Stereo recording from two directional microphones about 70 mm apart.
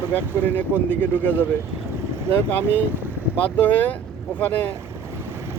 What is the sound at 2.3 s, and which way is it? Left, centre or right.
Speech, left.